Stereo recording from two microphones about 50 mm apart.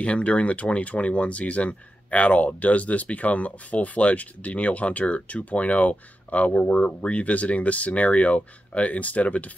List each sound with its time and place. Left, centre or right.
0.0 s speech: left